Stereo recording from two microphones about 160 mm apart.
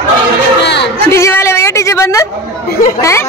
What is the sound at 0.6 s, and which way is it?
Speech, 90° left.